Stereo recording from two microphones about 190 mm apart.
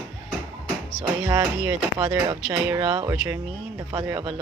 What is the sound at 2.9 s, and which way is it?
Speech, 25° right (ahead or behind).